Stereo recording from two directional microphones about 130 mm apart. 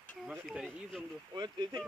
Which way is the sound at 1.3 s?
35° right (ahead or behind).